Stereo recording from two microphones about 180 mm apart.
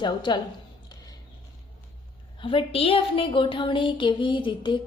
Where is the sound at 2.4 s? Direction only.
30° left (ahead or behind).